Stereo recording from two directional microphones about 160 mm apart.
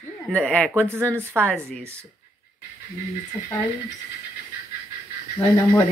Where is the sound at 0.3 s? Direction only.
10° left (ahead or behind).